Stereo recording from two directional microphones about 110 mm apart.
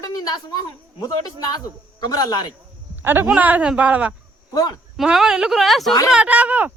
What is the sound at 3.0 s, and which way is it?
A man's voice, 20° right (ahead or behind).